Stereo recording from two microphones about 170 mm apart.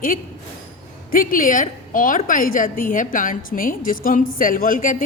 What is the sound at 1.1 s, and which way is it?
A woman's voice, 55° left (ahead or behind).